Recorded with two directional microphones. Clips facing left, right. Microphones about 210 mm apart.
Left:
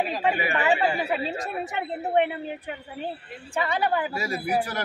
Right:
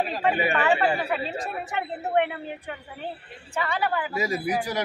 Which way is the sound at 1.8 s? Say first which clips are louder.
Left 1 dB; 20° left (ahead or behind).